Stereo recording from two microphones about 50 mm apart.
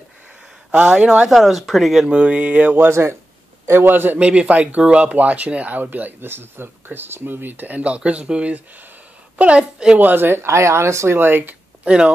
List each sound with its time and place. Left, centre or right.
0.7 s speech: right
1.3 s speech: centre
2.0 s speech: right
2.9 s a man's voice: right
3.9 s speech: right
4.2 s a woman's voice: right
9.9 s speech: right
11.1 s speech: right
11.8 s speech: right